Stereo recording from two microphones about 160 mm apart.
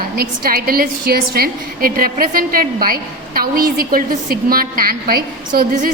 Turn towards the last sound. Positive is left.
turn(degrees=-65)  # may be behind; listen again after turning